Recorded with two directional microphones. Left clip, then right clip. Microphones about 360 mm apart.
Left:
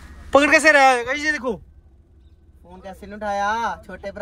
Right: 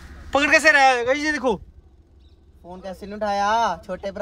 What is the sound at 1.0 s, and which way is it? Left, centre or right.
Speech, centre.